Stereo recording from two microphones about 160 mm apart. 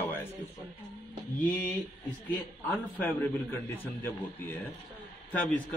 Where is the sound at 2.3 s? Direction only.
10° left (ahead or behind).